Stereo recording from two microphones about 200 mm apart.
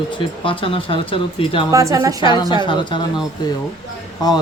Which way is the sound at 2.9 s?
25° left (ahead or behind).